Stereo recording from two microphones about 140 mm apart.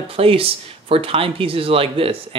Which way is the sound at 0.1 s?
40° right (ahead or behind).